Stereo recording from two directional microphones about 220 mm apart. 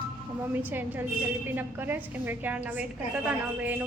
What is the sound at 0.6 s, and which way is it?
A woman's voice, 10° right (ahead or behind).